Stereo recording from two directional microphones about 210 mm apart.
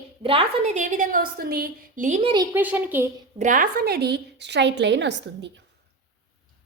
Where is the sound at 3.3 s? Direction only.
40° right (ahead or behind); by 5.5 s 55° right (ahead or behind).